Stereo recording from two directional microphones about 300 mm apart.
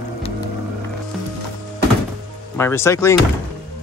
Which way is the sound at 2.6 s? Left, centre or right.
Centre.